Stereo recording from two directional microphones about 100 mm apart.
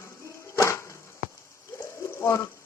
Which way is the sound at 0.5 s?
30° left (ahead or behind).